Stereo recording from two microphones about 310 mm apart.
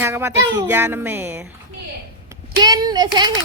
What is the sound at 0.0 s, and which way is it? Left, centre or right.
Speech, centre.